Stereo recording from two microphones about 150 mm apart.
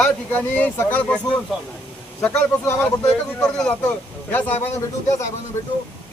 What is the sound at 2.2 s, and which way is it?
Speech, 10° left (ahead or behind).